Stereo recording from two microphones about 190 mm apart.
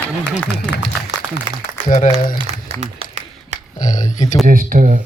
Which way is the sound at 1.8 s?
40° left (ahead or behind).